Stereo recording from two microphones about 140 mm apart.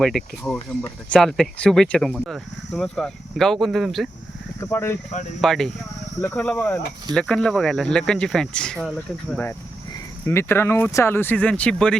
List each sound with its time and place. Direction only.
0.0 s speech: 5° left (ahead or behind)
4.7 s speech: 20° left (ahead or behind)
5.4 s speech: 5° left (ahead or behind)
10.2 s speech: 15° left (ahead or behind)